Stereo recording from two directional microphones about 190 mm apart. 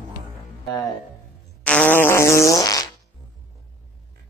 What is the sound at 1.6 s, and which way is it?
Fart, 5° left (ahead or behind).